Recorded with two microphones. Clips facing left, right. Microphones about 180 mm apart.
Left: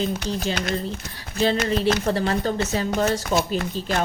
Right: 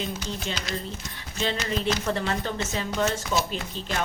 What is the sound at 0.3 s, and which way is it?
Speech, 35° left (ahead or behind).